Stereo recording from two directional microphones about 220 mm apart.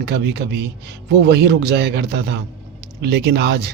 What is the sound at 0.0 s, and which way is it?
Speech, 50° right (ahead or behind).